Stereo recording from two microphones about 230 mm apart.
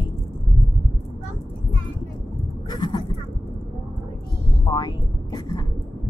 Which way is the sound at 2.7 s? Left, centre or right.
Centre.